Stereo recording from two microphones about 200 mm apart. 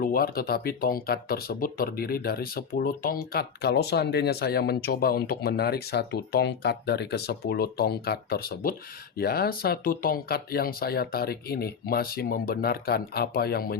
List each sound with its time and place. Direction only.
0.0 s speech: 45° left (ahead or behind)